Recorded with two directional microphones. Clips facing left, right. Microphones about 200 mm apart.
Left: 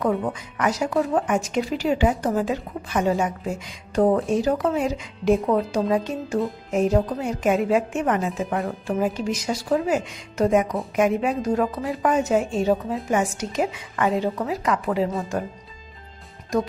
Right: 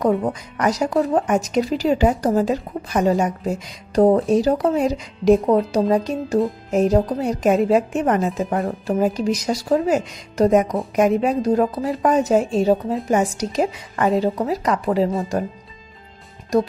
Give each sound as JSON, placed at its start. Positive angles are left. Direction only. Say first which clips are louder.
{"t": 0.0, "sound": "speech", "louder": "right 4 dB", "side_deg": -35}